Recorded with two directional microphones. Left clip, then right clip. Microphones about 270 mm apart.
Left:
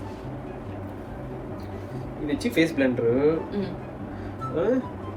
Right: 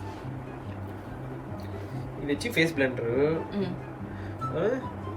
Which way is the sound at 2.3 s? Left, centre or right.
Centre.